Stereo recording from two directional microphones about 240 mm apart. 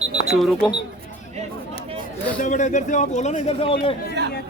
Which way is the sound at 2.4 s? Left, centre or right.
Left.